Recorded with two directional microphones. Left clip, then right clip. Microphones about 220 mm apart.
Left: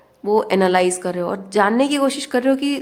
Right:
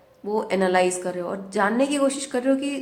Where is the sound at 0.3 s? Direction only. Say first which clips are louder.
Left 6 dB; 35° left (ahead or behind).